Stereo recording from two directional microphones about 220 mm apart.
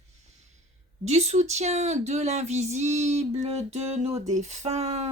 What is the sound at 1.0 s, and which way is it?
Speech, 30° right (ahead or behind).